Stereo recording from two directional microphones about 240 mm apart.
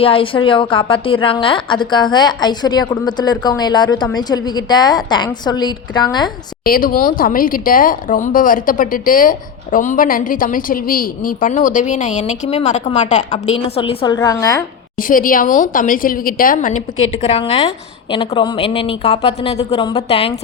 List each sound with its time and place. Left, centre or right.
0.0 s a woman's voice: left
6.7 s a woman's voice: left; by 14.6 s centre
14.9 s a woman's voice: left